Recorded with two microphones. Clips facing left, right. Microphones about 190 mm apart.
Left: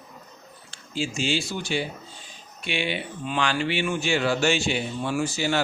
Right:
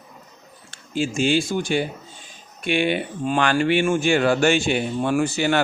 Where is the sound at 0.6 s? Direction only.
55° right (ahead or behind).